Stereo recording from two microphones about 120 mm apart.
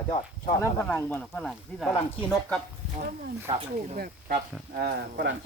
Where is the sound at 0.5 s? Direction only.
25° left (ahead or behind).